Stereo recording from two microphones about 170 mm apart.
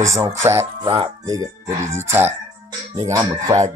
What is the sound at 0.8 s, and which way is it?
Speech, 30° right (ahead or behind).